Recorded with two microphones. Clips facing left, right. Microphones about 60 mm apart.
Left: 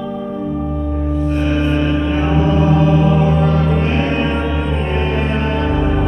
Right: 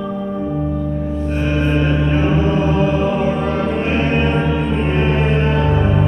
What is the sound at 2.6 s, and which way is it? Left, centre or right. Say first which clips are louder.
Mantra: left 2 dB; centre.